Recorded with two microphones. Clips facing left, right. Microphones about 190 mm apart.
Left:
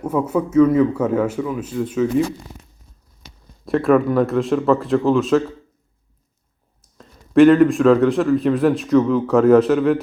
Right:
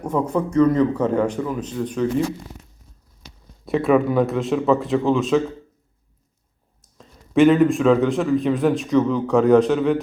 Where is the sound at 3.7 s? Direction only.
Centre (ahead or behind).